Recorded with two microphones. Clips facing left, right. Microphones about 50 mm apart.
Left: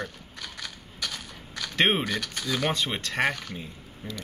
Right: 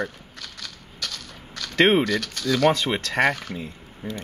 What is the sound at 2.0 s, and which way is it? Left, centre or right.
Speech, centre.